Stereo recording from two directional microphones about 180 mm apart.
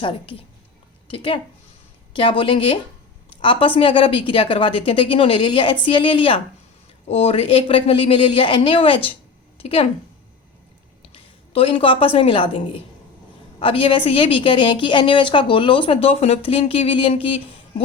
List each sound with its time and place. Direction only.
0.0 s a woman's voice: 30° left (ahead or behind)
3.2 s a sound: 30° left (ahead or behind)
3.8 s a woman's voice: 30° left (ahead or behind)
11.1 s a woman's voice: 30° left (ahead or behind)